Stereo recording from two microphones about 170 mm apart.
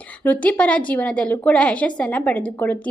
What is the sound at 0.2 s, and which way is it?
A woman's voice, 10° left (ahead or behind).